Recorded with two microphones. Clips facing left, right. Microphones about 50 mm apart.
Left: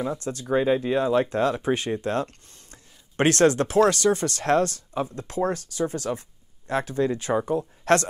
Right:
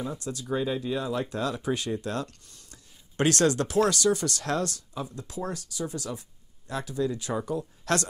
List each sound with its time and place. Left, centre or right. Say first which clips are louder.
0.0 s speech: left 5 dB; left